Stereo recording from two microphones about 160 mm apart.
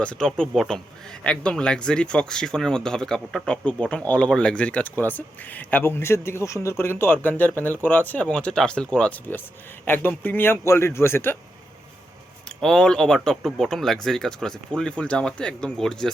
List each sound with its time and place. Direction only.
0.0 s speech: 5° left (ahead or behind)
12.5 s speech: 5° left (ahead or behind)